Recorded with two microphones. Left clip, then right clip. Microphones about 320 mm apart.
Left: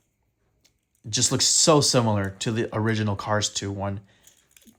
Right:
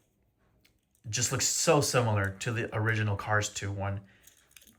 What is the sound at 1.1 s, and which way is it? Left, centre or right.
Speech, centre.